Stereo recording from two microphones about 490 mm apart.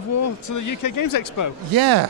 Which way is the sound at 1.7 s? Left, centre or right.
Right.